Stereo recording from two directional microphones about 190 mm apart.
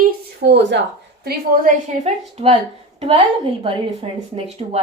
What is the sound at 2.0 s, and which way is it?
A woman's voice, 30° right (ahead or behind).